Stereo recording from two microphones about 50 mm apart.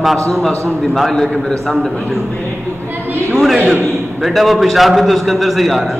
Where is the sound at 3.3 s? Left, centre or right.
Centre.